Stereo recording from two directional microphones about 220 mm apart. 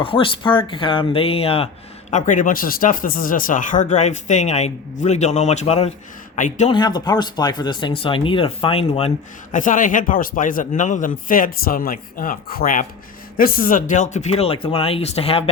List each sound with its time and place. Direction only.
0.0 s speech: 25° left (ahead or behind)
6.7 s speech: 20° left (ahead or behind)